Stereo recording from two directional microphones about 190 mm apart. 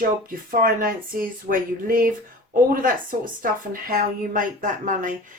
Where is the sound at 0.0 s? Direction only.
50° right (ahead or behind).